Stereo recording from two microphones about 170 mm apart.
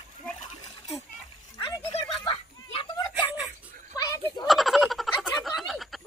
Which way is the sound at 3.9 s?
20° left (ahead or behind).